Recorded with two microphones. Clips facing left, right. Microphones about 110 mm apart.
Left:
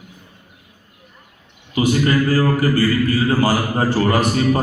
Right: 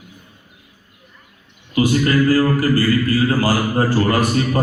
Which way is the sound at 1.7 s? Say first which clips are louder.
Right 1 dB; 20° left (ahead or behind).